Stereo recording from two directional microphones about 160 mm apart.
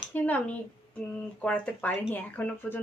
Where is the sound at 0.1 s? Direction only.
10° left (ahead or behind).